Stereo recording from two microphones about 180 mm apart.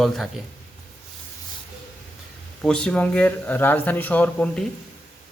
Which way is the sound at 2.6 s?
5° left (ahead or behind).